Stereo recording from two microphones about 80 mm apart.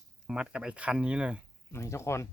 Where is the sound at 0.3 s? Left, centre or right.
Centre.